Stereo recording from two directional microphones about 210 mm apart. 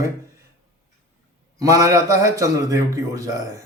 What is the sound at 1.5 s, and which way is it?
A man's voice, 15° right (ahead or behind).